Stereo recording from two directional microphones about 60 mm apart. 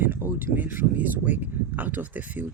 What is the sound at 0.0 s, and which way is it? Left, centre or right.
Speech, right.